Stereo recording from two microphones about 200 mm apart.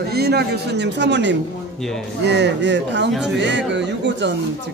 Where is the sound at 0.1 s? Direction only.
55° right (ahead or behind).